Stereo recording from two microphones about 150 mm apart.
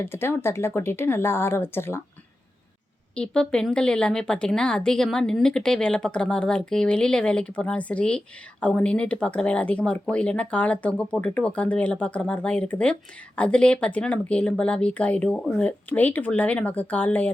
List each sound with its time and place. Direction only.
0.0 s speech: 15° left (ahead or behind)
3.2 s speech: 5° left (ahead or behind)